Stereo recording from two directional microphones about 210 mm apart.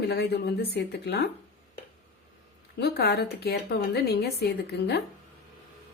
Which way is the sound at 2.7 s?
50° left (ahead or behind).